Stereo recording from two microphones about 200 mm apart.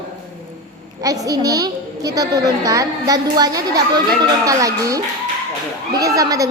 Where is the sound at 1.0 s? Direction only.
15° right (ahead or behind).